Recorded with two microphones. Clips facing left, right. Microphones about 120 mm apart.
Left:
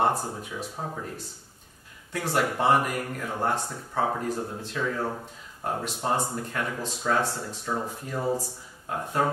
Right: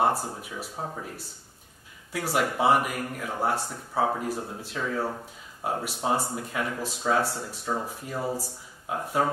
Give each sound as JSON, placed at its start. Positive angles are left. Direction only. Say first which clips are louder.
{"t": 0.0, "sound": "speech", "louder": "even", "side_deg": -5}
{"t": 2.1, "sound": "speech", "louder": "even", "side_deg": -5}